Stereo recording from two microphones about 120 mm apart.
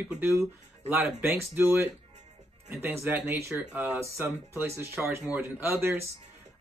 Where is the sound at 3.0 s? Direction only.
15° right (ahead or behind).